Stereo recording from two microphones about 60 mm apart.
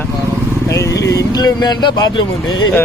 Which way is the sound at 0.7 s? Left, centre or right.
Left.